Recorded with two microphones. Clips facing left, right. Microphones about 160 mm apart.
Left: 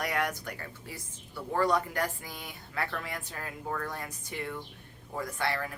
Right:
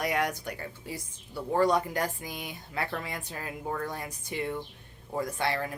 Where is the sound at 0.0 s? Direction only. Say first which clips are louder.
Right 2 dB; 15° right (ahead or behind).